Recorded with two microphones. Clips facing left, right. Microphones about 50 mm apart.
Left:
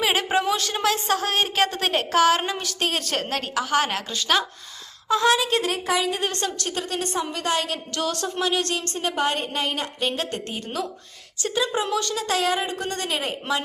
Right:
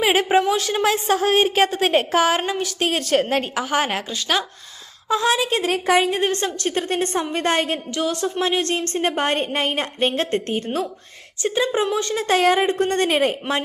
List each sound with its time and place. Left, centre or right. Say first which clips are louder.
0.0 s a sound: right 5 dB; centre
0.4 s a woman's voice: right 3 dB; centre
3.2 s speech: right 4 dB; right
4.1 s a woman's voice: even; centre
5.6 s a woman's voice: right 5 dB; right
7.9 s a woman's voice: right 3 dB; centre
8.4 s a woman's voice: right 3 dB; right